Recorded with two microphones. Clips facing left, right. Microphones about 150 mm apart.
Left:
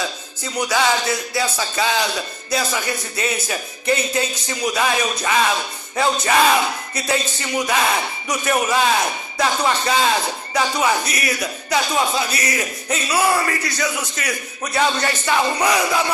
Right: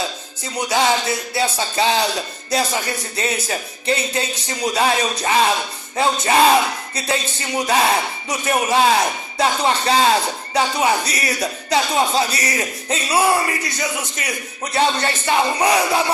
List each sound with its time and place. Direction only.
0.5 s speech: 25° right (ahead or behind)